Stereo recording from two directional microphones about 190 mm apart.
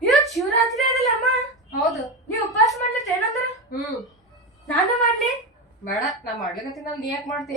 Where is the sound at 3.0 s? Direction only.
Centre (ahead or behind).